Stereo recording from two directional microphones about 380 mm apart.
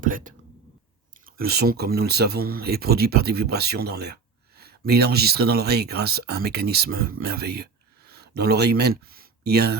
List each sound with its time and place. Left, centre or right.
0.0 s speech: right